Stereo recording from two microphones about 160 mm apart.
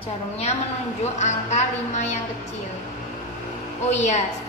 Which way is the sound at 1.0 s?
45° left (ahead or behind).